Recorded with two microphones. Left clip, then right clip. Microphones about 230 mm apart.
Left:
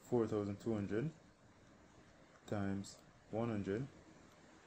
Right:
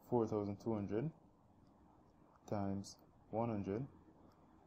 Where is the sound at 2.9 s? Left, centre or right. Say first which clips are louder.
Even; centre.